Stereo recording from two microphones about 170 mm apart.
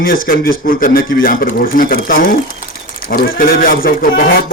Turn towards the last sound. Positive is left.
turn(degrees=60)  # may be behind; listen again after turning